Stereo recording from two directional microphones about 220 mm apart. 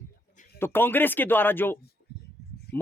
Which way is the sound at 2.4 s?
50° left (ahead or behind).